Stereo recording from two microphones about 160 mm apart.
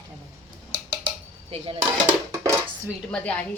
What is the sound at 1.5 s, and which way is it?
Speech, 35° right (ahead or behind).